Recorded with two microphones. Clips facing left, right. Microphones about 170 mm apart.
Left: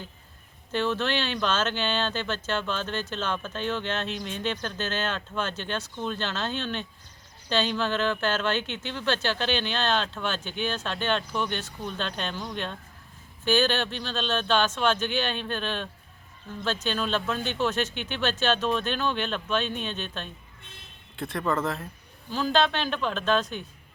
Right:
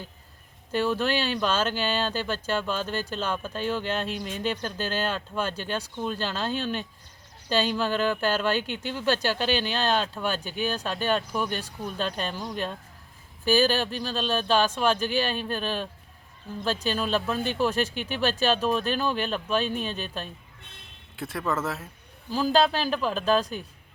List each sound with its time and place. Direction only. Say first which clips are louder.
0.7 s speech: right 2 dB; 10° right (ahead or behind)
22.5 s speech: right 2 dB; 35° right (ahead or behind)
22.8 s speech: right 2 dB; 5° right (ahead or behind)